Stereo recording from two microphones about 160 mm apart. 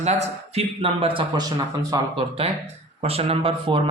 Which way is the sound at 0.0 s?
40° right (ahead or behind).